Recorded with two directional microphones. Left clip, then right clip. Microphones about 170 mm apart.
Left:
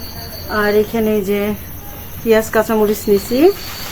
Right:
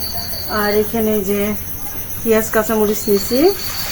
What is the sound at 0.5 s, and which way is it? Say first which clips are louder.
Speech: left 2 dB; 20° left (ahead or behind).